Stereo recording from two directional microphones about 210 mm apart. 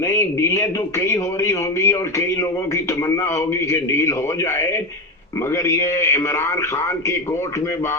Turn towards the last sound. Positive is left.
turn(degrees=15)  # may be behind; listen again after turning